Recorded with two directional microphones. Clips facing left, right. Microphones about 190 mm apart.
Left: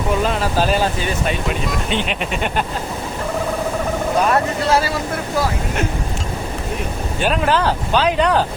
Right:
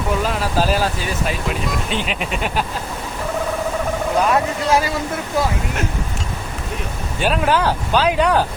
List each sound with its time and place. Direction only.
0.3 s speech: 5° right (ahead or behind)
4.3 s speech: 15° right (ahead or behind)
7.2 s speech: 5° right (ahead or behind)